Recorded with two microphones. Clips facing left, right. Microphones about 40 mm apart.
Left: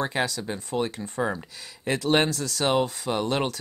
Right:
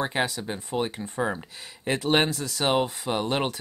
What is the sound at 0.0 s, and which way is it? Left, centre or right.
Speech, right.